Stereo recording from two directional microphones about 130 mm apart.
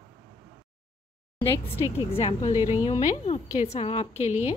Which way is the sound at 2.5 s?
20° right (ahead or behind).